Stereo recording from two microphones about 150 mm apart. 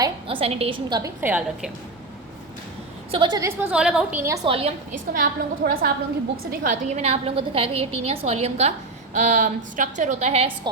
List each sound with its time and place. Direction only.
0.3 s a woman's voice: 40° right (ahead or behind)
0.9 s a woman's voice: 25° right (ahead or behind)
1.2 s a woman's voice: 10° right (ahead or behind)
3.1 s a woman's voice: 30° right (ahead or behind)
3.6 s a woman's voice: 5° right (ahead or behind)
4.4 s a woman's voice: 40° right (ahead or behind)
5.2 s a woman's voice: 80° right
6.5 s a woman's voice: 65° right (ahead or behind); by 10.5 s 45° right (ahead or behind)